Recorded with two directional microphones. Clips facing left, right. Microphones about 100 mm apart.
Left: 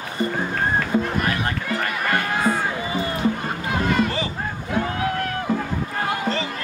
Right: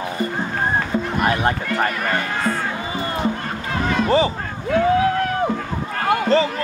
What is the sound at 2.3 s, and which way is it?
Run, 10° left (ahead or behind).